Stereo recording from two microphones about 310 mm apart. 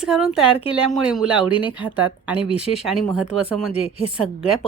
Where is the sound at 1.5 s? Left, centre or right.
Centre.